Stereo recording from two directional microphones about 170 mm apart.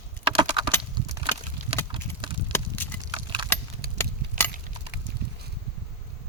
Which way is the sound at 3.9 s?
10° left (ahead or behind).